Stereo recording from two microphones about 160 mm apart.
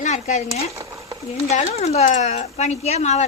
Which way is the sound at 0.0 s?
50° left (ahead or behind).